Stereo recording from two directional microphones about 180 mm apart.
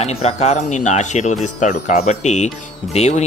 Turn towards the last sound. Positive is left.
turn(degrees=40)  # may be behind; listen again after turning